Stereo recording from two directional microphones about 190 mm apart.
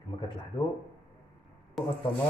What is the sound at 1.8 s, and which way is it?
Speech, centre (ahead or behind).